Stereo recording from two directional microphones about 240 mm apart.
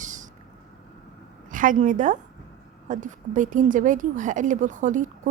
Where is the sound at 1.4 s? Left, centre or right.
Right.